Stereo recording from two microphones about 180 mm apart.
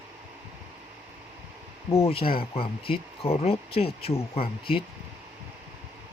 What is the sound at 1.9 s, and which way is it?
Speech, 35° left (ahead or behind).